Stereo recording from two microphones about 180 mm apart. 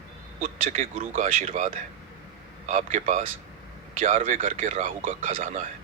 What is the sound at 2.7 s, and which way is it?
Speech, 45° right (ahead or behind).